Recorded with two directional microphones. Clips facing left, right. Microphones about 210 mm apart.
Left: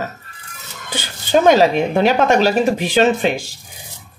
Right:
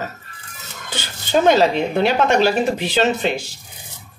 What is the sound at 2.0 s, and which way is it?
Speech, 45° left (ahead or behind).